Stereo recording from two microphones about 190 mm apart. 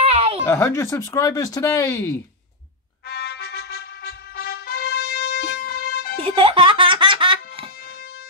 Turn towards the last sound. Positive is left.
turn(degrees=-25)  # may be behind; listen again after turning